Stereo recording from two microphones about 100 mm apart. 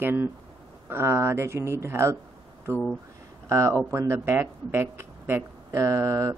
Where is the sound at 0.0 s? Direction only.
20° right (ahead or behind).